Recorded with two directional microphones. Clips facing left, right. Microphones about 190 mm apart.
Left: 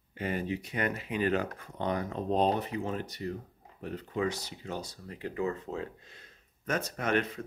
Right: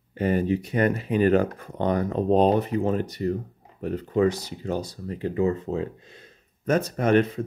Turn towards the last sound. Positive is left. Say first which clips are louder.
# right 9 dB
turn(degrees=-30)  # may be behind; listen again after turning